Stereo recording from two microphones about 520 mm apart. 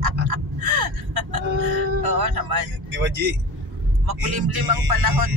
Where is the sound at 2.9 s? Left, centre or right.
Centre.